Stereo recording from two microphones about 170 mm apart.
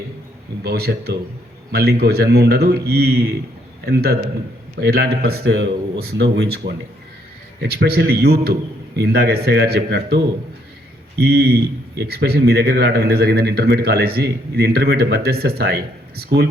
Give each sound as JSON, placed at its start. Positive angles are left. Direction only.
{"t": 0.6, "sound": "a man's voice", "side_deg": -70}
{"t": 11.2, "sound": "a man's voice", "side_deg": -70}